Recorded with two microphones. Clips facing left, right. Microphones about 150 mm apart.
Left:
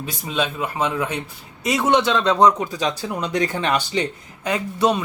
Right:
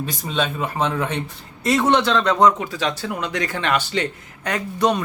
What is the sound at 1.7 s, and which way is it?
A man's voice, 15° left (ahead or behind).